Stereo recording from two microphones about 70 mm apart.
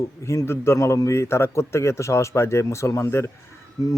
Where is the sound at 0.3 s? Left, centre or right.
Left.